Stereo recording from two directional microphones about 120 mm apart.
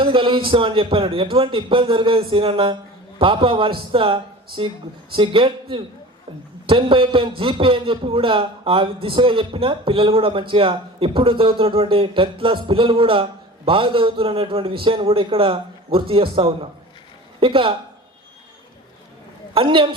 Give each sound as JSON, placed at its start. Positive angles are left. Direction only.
{"t": 0.0, "sound": "a man's voice", "side_deg": -45}
{"t": 19.5, "sound": "a man's voice", "side_deg": -45}